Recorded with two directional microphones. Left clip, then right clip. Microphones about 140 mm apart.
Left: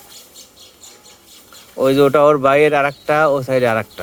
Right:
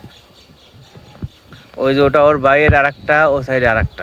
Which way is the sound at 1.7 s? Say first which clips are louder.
Even; 25° left (ahead or behind).